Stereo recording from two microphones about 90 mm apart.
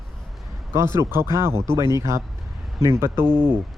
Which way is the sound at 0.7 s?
30° right (ahead or behind).